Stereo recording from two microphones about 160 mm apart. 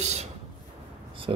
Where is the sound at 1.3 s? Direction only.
35° right (ahead or behind).